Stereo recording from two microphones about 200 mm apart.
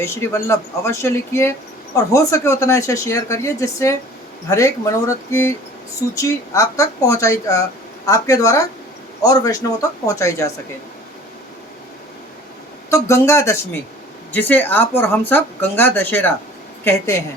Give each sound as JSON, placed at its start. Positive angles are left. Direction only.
{"t": 0.0, "sound": "speech", "side_deg": 15}
{"t": 12.9, "sound": "speech", "side_deg": 15}